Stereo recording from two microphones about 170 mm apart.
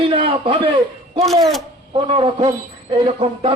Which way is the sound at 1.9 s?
30° right (ahead or behind).